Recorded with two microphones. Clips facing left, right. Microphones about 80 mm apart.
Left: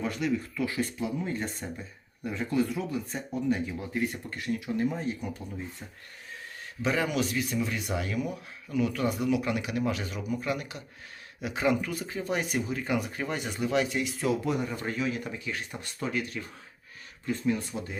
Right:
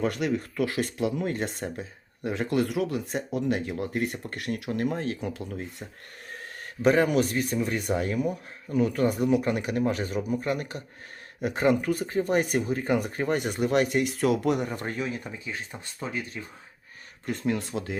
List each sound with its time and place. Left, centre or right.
0.0 s speech: right
6.8 s speech: right
15.4 s speech: right
17.2 s speech: right